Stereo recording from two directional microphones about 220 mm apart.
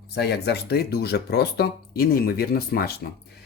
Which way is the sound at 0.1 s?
50° left (ahead or behind).